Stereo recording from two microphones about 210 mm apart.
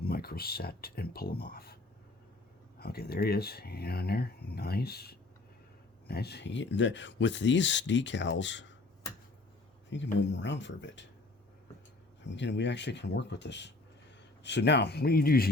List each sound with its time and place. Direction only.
0.0 s speech: 45° left (ahead or behind)
9.9 s speech: 60° left (ahead or behind)
12.2 s speech: 60° left (ahead or behind)